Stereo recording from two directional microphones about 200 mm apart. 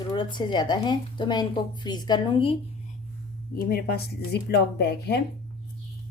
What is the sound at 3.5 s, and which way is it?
Speech, 50° left (ahead or behind).